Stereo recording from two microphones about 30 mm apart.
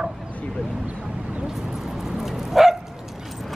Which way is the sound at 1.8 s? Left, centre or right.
Centre.